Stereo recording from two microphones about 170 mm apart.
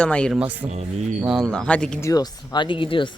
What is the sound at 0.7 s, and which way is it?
Speech, 40° right (ahead or behind).